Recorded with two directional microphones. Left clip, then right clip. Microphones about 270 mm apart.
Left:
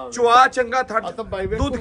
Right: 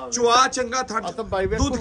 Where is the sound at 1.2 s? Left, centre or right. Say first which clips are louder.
Right 1 dB; right.